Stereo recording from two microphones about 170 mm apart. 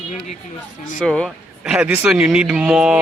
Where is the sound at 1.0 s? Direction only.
5° left (ahead or behind).